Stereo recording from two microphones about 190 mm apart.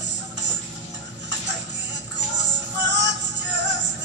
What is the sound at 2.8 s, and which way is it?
Music, 65° right (ahead or behind).